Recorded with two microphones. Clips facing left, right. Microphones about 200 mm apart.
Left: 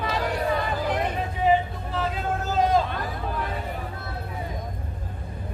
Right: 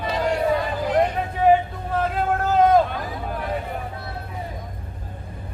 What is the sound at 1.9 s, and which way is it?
Vehicle, 55° right (ahead or behind).